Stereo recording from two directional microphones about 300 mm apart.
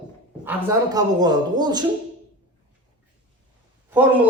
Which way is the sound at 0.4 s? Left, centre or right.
Centre.